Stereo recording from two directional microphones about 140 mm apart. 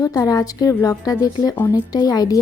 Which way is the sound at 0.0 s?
25° left (ahead or behind).